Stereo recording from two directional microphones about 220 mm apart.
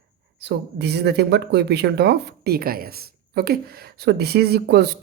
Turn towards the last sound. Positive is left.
turn(degrees=-50)  # may be behind; listen again after turning